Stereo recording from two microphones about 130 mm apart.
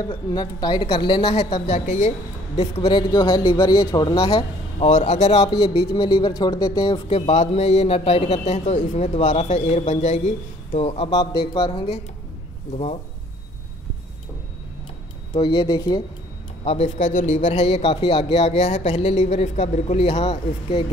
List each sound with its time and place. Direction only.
0.1 s a woman's voice: 35° left (ahead or behind); by 1.8 s 50° left (ahead or behind)
1.9 s a man's voice: 65° left (ahead or behind)
2.9 s a woman's voice: 35° left (ahead or behind)
4.9 s speech: 65° left (ahead or behind); by 6.8 s 25° left (ahead or behind)
6.8 s a man's voice: 50° left (ahead or behind)
11.1 s a woman's voice: 30° left (ahead or behind)
12.7 s a man's voice: 55° left (ahead or behind)
15.3 s speech: 45° left (ahead or behind)
16.6 s a man's voice: 65° left (ahead or behind)
17.6 s a man's voice: 50° left (ahead or behind)